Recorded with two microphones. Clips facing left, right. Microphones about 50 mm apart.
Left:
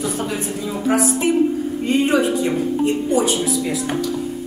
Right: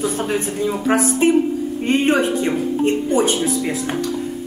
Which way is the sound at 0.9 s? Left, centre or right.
Right.